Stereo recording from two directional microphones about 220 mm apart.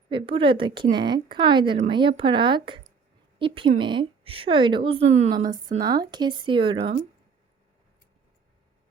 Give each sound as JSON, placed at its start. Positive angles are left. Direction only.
{"t": 0.1, "sound": "speech", "side_deg": -25}
{"t": 5.5, "sound": "speech", "side_deg": -20}